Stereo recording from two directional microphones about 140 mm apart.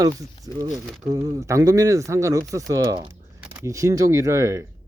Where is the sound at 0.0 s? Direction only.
25° right (ahead or behind).